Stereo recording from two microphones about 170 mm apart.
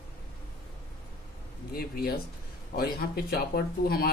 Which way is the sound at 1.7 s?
60° left (ahead or behind).